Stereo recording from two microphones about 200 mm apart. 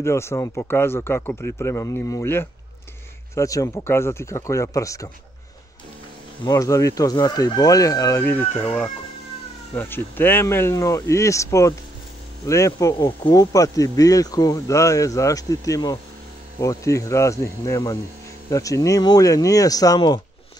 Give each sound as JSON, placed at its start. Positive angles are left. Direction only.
{"t": 0.0, "sound": "speech", "side_deg": 15}
{"t": 6.4, "sound": "speech", "side_deg": 15}
{"t": 9.8, "sound": "speech", "side_deg": 10}